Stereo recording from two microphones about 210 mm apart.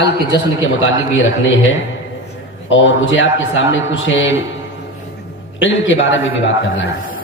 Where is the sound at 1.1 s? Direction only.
65° left (ahead or behind).